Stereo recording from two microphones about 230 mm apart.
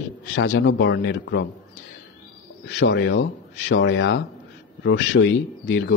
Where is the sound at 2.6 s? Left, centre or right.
Left.